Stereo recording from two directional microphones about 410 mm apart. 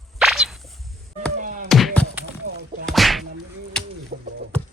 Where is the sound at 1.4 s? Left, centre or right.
Centre.